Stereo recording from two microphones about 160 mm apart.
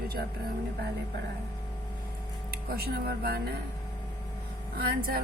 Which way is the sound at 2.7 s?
75° right (ahead or behind).